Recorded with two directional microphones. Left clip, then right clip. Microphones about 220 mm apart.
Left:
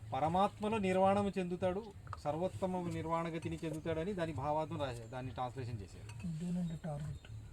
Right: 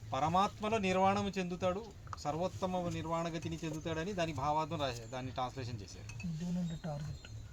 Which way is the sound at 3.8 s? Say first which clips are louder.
Right 1 dB; 40° right (ahead or behind).